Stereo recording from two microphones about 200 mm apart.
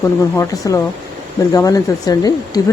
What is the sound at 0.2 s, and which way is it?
Speech, 15° left (ahead or behind).